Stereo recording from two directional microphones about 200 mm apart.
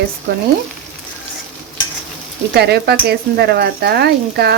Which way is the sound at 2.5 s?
55° right (ahead or behind).